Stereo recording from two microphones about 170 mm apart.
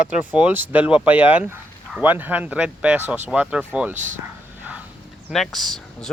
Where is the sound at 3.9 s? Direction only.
45° right (ahead or behind).